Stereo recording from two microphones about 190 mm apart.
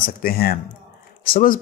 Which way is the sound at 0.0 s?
50° left (ahead or behind).